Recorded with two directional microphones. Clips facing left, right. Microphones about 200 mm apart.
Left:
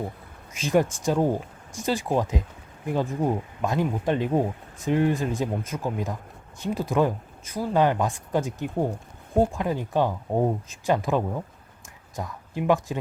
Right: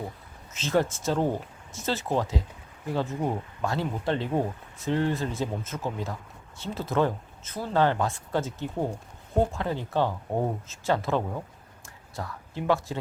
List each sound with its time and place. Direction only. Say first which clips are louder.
0.5 s speech: left 3 dB; 15° left (ahead or behind)